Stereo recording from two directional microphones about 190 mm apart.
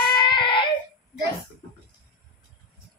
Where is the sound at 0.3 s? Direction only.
25° left (ahead or behind).